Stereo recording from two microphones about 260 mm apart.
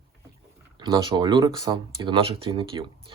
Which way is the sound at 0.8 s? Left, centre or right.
Centre.